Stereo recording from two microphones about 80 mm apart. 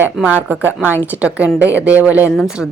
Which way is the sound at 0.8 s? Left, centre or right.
Left.